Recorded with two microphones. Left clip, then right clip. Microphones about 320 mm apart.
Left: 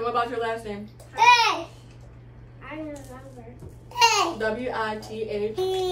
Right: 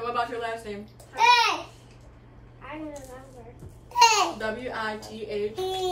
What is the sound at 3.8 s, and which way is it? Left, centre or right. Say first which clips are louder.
Speech: right 1 dB; centre.